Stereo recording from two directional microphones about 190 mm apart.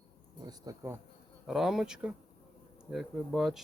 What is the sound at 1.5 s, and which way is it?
Speech, centre (ahead or behind).